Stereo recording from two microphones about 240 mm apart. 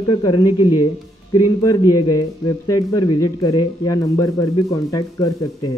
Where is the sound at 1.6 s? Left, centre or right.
Centre.